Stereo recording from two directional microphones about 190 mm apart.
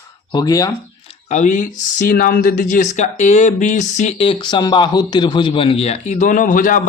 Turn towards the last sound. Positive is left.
turn(degrees=45)  # may be behind; listen again after turning